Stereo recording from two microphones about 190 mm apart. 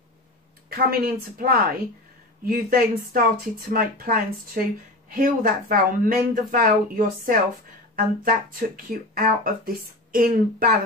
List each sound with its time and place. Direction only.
0.7 s speech: 50° right (ahead or behind)